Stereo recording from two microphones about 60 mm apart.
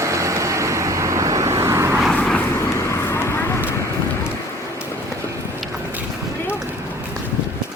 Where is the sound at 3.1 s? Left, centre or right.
Left.